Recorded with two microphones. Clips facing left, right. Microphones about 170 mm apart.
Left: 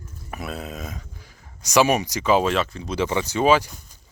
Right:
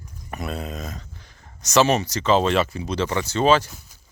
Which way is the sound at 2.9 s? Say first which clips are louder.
Left 1 dB; 15° left (ahead or behind).